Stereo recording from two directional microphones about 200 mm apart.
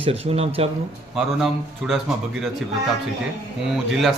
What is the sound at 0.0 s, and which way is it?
Speech, 30° right (ahead or behind).